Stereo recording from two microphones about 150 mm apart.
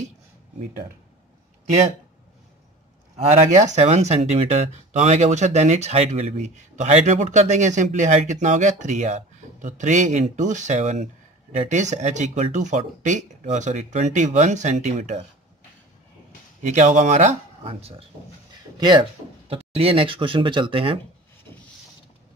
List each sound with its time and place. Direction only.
3.6 s speech: 50° right (ahead or behind)
16.6 s speech: 55° right (ahead or behind)
17.6 s speech: 40° right (ahead or behind)
18.8 s speech: 30° right (ahead or behind)